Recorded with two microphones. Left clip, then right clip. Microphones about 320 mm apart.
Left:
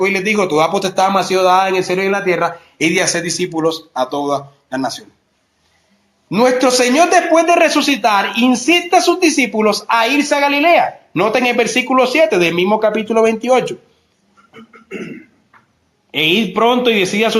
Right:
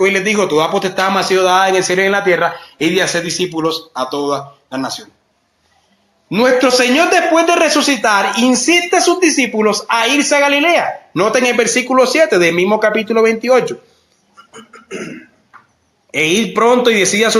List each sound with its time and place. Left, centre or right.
0.0 s a man's voice: centre
6.3 s a man's voice: centre
14.7 s a sound: right
16.1 s a man's voice: centre